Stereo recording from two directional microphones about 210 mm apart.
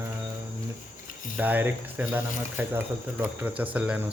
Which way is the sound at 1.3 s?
10° right (ahead or behind).